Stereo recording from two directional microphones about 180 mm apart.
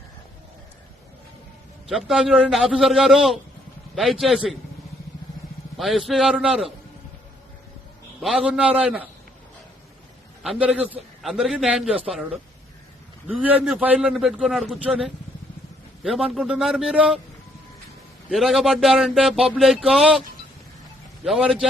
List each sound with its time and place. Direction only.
1.9 s speech: centre (ahead or behind)
5.7 s speech: centre (ahead or behind)
8.2 s speech: centre (ahead or behind)
10.4 s speech: 5° right (ahead or behind)
18.3 s speech: centre (ahead or behind)
21.2 s speech: centre (ahead or behind)